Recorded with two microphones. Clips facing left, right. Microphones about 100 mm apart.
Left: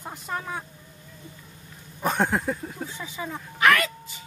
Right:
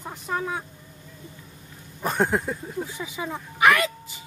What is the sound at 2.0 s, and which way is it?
Speech, centre (ahead or behind).